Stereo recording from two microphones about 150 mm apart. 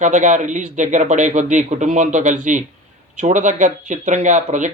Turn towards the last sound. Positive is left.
turn(degrees=-55)  # may be behind; listen again after turning